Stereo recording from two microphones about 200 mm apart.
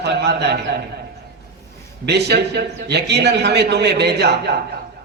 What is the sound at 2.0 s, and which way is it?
A man's voice, 55° right (ahead or behind).